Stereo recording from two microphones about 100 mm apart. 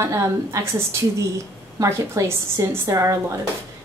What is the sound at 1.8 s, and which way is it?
A woman's voice, 30° right (ahead or behind).